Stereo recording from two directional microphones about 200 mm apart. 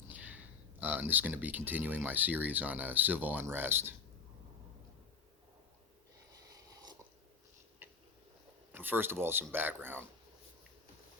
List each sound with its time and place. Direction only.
0.1 s speech: 10° right (ahead or behind)
6.5 s a sound: 15° right (ahead or behind)
8.7 s speech: 10° right (ahead or behind)